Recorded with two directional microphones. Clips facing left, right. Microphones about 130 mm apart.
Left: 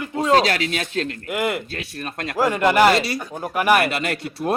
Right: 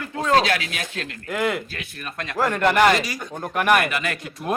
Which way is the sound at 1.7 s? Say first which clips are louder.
Left 3 dB; 35° left (ahead or behind).